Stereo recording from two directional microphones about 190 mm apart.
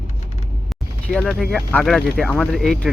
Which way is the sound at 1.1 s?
5° left (ahead or behind).